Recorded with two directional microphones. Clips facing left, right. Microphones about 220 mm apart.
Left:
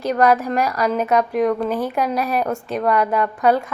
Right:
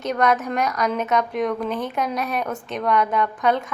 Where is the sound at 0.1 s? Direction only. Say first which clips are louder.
Left 4 dB; centre (ahead or behind).